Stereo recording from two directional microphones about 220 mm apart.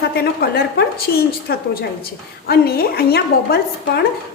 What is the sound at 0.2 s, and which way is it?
A woman's voice, 45° left (ahead or behind).